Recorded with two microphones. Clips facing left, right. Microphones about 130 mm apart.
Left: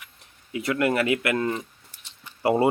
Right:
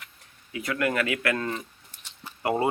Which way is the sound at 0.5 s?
25° left (ahead or behind).